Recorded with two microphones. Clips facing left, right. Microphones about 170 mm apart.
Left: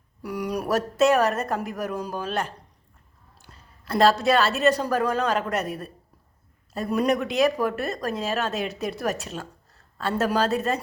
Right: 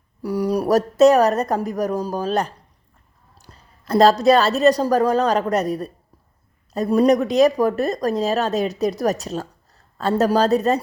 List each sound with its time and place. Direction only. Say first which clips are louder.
0.2 s a woman's voice: right 7 dB; 35° right (ahead or behind)